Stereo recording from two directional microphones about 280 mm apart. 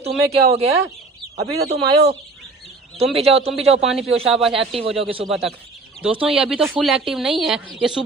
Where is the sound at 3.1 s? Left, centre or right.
Right.